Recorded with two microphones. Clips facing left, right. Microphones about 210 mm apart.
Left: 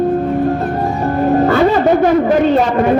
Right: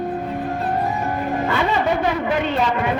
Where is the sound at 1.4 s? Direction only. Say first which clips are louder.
Left 7 dB; 40° left (ahead or behind).